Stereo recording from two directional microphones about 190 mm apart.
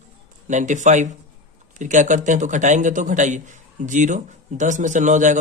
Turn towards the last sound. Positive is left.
turn(degrees=-40)  # may be behind; listen again after turning